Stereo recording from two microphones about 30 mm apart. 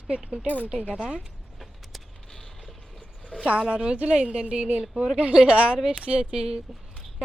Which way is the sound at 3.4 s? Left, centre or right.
Right.